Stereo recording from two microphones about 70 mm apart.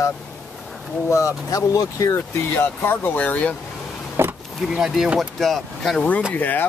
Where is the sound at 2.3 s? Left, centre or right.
Left.